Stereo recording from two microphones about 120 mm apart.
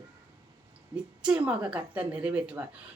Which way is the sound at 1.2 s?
10° right (ahead or behind).